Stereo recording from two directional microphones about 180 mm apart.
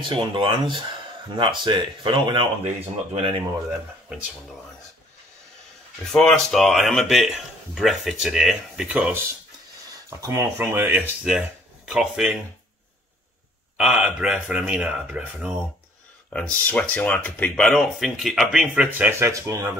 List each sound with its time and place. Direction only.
0.0 s speech: 25° right (ahead or behind)
6.0 s speech: 5° left (ahead or behind)
13.7 s speech: 5° right (ahead or behind)
16.3 s speech: 5° left (ahead or behind); by 19.7 s 15° right (ahead or behind)